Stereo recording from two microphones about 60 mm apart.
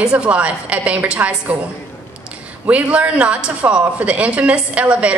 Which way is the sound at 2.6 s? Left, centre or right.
Right.